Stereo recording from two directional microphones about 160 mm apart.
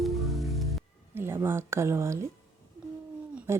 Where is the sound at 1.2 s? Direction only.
15° right (ahead or behind).